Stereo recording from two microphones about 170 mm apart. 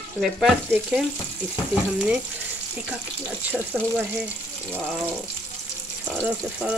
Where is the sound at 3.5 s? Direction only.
10° right (ahead or behind).